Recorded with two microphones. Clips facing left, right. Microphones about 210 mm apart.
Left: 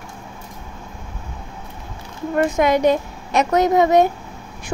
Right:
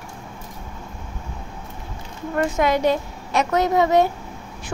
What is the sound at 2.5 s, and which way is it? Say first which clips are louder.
Speech: left 3 dB; 15° left (ahead or behind).